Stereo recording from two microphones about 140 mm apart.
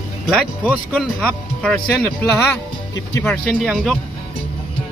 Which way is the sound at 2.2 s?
15° left (ahead or behind).